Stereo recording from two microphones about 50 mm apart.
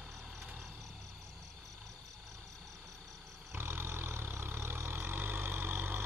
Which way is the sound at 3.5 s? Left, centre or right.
Right.